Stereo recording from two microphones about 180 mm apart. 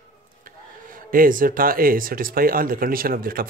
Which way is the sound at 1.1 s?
50° right (ahead or behind).